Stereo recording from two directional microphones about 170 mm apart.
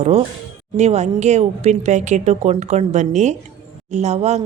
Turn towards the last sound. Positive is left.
turn(degrees=-40)  # may be behind; listen again after turning